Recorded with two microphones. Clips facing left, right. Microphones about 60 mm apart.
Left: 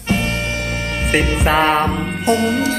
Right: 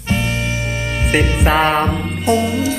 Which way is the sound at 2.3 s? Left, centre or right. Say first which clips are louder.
Even; left.